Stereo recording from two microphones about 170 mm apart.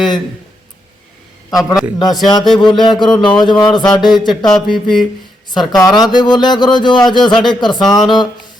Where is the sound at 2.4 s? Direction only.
Centre (ahead or behind).